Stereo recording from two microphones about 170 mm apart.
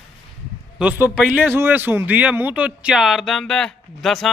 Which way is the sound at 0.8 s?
10° right (ahead or behind).